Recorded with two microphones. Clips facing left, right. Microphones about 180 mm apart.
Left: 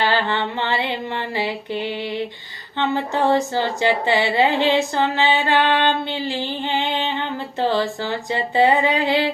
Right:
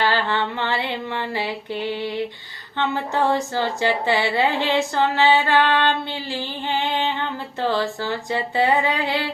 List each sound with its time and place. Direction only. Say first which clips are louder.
0.0 s speech: left 1 dB; 20° left (ahead or behind)